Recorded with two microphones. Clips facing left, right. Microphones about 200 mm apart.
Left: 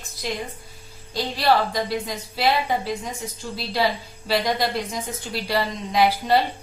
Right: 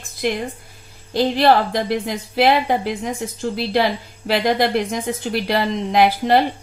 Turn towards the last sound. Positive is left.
turn(degrees=-60)  # may be behind; listen again after turning